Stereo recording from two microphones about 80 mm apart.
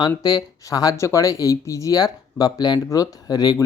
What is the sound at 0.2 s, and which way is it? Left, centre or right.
Speech, left.